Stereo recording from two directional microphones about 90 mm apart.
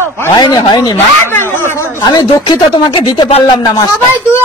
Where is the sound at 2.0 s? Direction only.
45° left (ahead or behind).